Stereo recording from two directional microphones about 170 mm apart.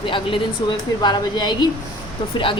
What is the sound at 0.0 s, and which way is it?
Speech, 30° left (ahead or behind).